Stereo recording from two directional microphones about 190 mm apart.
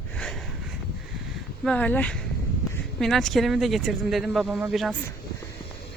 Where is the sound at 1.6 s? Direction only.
5° left (ahead or behind).